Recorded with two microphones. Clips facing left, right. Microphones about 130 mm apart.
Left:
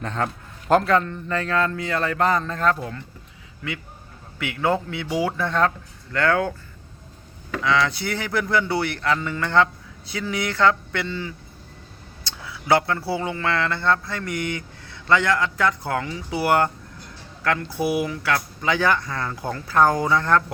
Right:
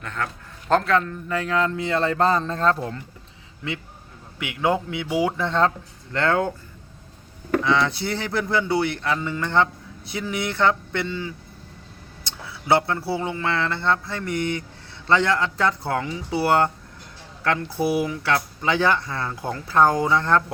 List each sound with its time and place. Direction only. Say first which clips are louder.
0.0 s speech: left 4 dB; 30° left (ahead or behind)
0.7 s speech: left 2 dB; 5° left (ahead or behind); by 3.0 s 30° right (ahead or behind)
4.4 s speech: even; 15° right (ahead or behind)
7.6 s speech: left 3 dB; 25° right (ahead or behind)
12.2 s a sound: even; 25° right (ahead or behind)
13.1 s speech: even; 25° right (ahead or behind)